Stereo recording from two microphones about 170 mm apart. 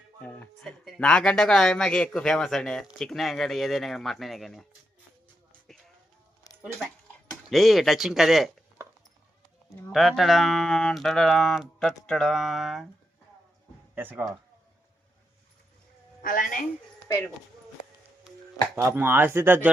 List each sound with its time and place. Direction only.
0.2 s speech: 5° left (ahead or behind)
7.5 s speech: centre (ahead or behind)
9.9 s speech: centre (ahead or behind)
13.9 s speech: 10° right (ahead or behind)
16.2 s a woman's voice: 55° left (ahead or behind)
18.8 s speech: 15° right (ahead or behind)